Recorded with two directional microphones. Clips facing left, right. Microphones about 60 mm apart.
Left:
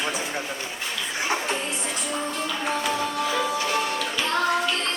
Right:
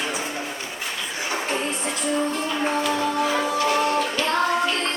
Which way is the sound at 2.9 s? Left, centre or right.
Right.